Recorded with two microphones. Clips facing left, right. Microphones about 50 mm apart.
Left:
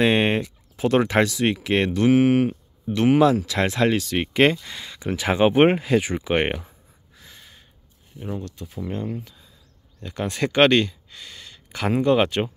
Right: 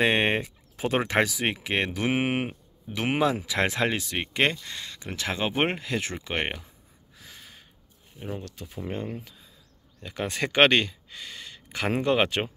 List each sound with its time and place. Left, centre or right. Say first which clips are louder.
0.0 s speech: left 4 dB; centre
4.2 s speech: left 6 dB; centre
7.2 s a sound: even; centre
8.2 s speech: left 4 dB; centre
10.4 s a sound: left 3 dB; centre
12.0 s speech: left 5 dB; centre